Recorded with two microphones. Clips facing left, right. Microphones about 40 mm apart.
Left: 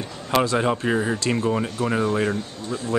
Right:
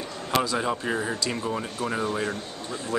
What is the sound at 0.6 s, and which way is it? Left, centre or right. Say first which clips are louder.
Speech: left 5 dB; left.